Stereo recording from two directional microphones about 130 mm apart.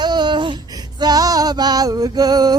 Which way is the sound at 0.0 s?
35° right (ahead or behind).